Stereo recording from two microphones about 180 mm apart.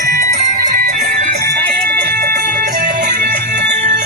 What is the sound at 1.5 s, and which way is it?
Music, 65° right (ahead or behind).